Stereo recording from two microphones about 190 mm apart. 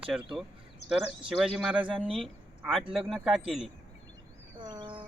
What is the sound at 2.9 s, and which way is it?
Speech, centre (ahead or behind).